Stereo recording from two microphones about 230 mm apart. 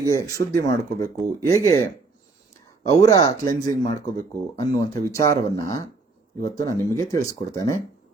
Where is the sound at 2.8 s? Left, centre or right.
Centre.